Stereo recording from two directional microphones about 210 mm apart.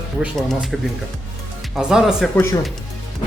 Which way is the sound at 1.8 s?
5° right (ahead or behind).